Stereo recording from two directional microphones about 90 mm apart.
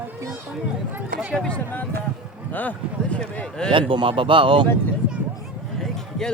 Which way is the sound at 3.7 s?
75° right (ahead or behind).